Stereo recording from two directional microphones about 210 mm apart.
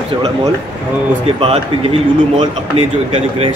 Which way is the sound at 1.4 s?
25° right (ahead or behind).